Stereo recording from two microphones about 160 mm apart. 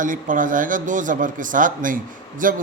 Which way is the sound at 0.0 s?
55° right (ahead or behind).